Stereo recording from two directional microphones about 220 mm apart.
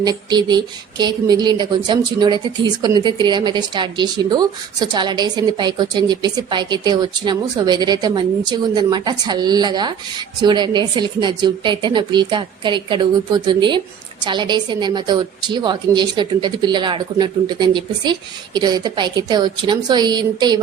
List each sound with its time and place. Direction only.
0.0 s speech: 20° right (ahead or behind)